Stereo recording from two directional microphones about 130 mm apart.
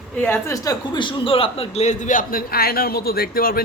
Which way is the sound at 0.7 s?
40° left (ahead or behind).